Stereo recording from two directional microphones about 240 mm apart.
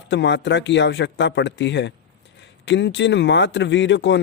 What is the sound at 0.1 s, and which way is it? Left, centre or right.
Speech, left.